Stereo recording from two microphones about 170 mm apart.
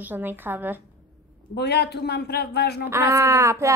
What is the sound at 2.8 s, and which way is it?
Speech, 15° right (ahead or behind).